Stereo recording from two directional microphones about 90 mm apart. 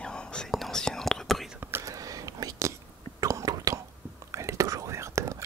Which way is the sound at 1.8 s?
40° right (ahead or behind).